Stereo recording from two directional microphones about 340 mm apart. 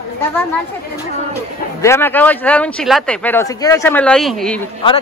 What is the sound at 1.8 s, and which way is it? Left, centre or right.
Speech, centre.